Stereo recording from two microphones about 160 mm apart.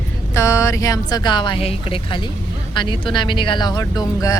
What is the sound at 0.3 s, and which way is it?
Speech, 15° left (ahead or behind).